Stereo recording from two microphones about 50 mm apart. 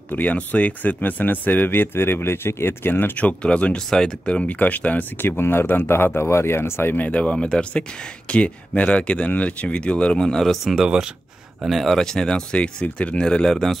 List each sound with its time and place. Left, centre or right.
0.1 s speech: left
3.2 s speech: left
5.4 s speech: left
7.0 s speech: left; by 10.6 s centre
10.8 s speech: centre
11.6 s speech: centre